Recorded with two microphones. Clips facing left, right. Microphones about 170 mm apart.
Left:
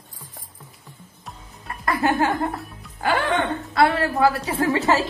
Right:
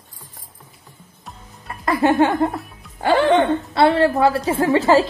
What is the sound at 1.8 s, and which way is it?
A woman's voice, 25° right (ahead or behind).